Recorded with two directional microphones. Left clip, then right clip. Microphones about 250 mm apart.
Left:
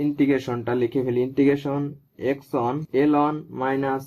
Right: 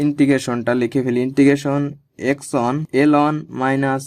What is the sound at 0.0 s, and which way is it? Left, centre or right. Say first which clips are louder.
Speech: right 5 dB; right.